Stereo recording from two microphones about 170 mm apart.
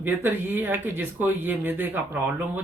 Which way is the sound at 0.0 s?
10° right (ahead or behind).